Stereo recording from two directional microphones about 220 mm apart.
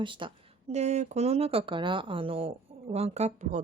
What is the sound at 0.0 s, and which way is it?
A woman's voice, 20° right (ahead or behind).